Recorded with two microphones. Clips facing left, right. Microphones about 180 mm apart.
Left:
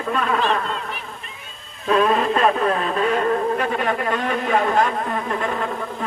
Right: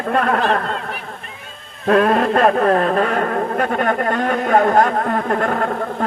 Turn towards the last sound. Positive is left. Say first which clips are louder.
# right 5 dB
turn(degrees=-55)  # may be behind; listen again after turning